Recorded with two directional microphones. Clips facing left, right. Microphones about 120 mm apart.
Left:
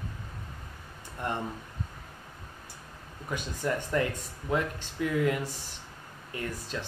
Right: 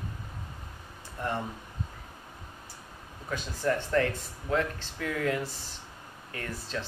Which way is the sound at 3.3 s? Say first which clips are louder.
Right 2 dB; 15° left (ahead or behind).